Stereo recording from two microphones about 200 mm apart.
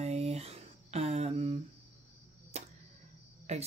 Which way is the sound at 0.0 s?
30° right (ahead or behind).